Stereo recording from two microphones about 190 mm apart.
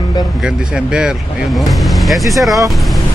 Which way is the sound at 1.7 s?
Centre (ahead or behind).